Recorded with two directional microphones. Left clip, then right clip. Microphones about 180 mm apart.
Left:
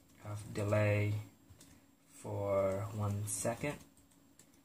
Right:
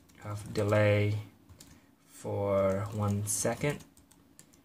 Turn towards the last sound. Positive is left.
turn(degrees=-25)  # may be behind; listen again after turning